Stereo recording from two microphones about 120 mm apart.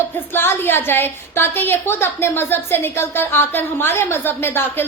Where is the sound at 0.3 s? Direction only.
20° left (ahead or behind).